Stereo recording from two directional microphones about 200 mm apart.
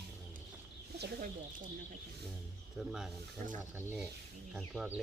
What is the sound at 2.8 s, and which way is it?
Speech, centre (ahead or behind).